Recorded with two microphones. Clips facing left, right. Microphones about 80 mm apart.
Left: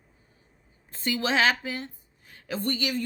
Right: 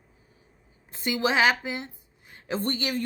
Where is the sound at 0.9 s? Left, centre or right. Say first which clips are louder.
Right 1 dB; centre.